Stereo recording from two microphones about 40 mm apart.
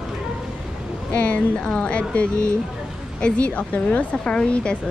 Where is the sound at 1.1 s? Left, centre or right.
Left.